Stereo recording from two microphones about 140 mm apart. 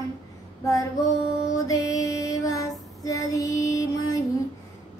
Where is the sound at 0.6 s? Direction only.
25° left (ahead or behind).